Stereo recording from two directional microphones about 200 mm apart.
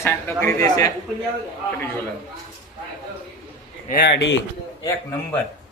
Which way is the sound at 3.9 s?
55° left (ahead or behind).